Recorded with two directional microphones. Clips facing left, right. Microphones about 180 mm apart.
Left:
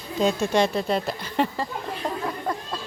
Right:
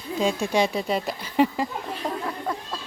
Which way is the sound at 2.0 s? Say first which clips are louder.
Even; 10° right (ahead or behind).